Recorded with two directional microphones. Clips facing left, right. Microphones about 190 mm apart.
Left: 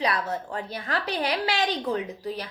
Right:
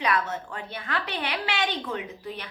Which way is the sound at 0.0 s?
35° left (ahead or behind).